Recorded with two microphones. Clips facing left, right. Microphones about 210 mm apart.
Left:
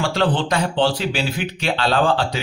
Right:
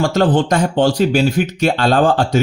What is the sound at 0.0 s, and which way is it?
Speech, 45° right (ahead or behind).